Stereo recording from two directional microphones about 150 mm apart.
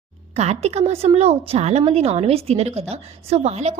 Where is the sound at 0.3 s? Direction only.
45° right (ahead or behind).